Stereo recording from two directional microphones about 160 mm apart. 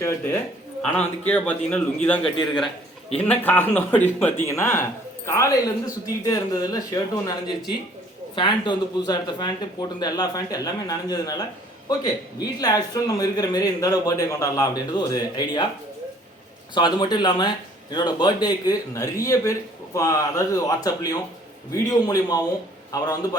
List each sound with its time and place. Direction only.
0.9 s speech: 10° left (ahead or behind)
16.7 s speech: 25° left (ahead or behind)